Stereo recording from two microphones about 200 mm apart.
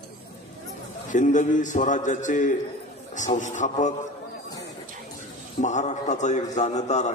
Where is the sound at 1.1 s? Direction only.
40° left (ahead or behind).